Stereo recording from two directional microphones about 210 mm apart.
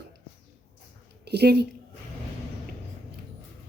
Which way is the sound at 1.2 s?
50° right (ahead or behind).